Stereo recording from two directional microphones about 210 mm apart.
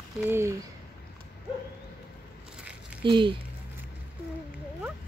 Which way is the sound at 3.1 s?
25° right (ahead or behind).